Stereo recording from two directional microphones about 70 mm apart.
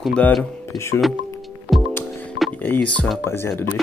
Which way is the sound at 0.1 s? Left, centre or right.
Centre.